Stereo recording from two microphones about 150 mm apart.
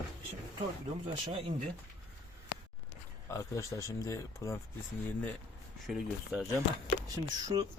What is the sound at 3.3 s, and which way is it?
Speech, 20° left (ahead or behind).